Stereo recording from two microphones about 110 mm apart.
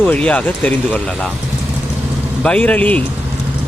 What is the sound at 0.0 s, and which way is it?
Speech, 10° left (ahead or behind).